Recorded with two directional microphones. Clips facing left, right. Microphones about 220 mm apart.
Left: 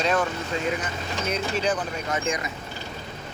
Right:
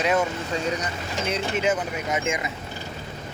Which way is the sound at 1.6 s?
20° right (ahead or behind).